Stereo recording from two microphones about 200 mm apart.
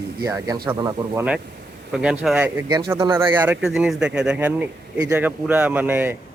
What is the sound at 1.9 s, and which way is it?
Speech, 5° right (ahead or behind).